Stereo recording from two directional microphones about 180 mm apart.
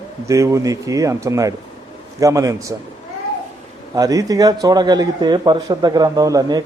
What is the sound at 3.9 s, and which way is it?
A man's voice, 20° right (ahead or behind).